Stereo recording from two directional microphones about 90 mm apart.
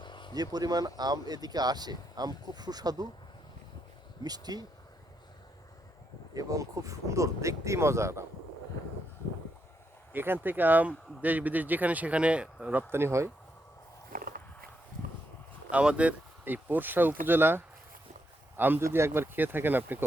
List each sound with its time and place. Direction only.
0.0 s a sound: 60° left (ahead or behind)
0.3 s speech: 45° right (ahead or behind)
4.2 s speech: 50° right (ahead or behind)
6.3 s speech: 40° right (ahead or behind)
10.1 s speech: 25° right (ahead or behind)
12.9 s speech: 30° right (ahead or behind)
15.7 s speech: 10° right (ahead or behind)